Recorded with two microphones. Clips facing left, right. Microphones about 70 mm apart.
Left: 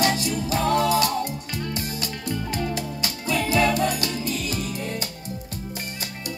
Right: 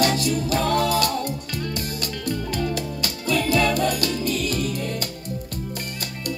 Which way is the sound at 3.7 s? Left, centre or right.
Right.